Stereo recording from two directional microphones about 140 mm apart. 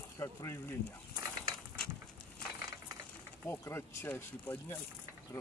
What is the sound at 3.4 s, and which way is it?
Speech, 15° left (ahead or behind).